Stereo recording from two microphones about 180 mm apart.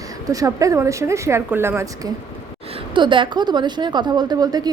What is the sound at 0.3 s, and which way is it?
A woman's voice, 20° right (ahead or behind).